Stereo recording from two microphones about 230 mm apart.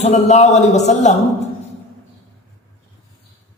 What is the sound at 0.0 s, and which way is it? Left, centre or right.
A man's voice, left.